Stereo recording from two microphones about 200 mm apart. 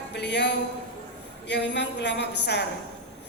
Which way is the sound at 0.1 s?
60° left (ahead or behind).